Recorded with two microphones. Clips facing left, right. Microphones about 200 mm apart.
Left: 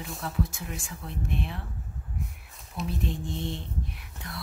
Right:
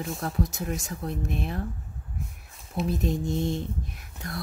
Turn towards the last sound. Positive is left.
turn(degrees=-45)  # may be behind; listen again after turning